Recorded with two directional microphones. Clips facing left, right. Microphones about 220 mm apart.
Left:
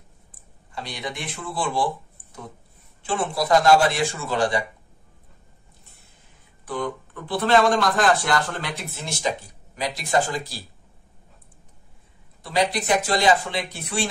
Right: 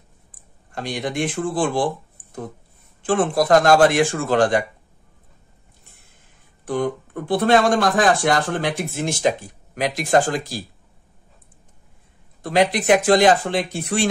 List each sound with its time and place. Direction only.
0.7 s speech: 50° right (ahead or behind)
6.6 s speech: 50° right (ahead or behind)
12.4 s speech: 50° right (ahead or behind)